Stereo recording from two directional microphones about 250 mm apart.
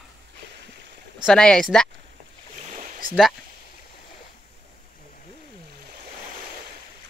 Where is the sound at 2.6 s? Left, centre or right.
Right.